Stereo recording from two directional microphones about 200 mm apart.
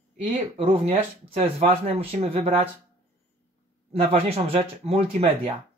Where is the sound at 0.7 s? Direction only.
30° right (ahead or behind).